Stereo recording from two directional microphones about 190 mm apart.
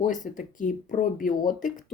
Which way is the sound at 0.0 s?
45° left (ahead or behind).